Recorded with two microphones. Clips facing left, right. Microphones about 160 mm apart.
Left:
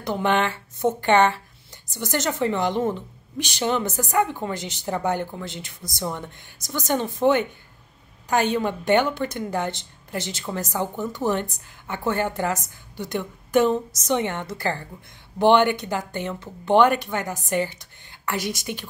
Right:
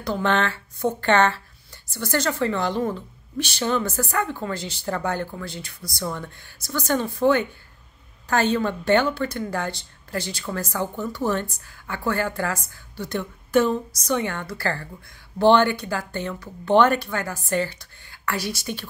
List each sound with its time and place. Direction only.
0.0 s speech: 15° left (ahead or behind)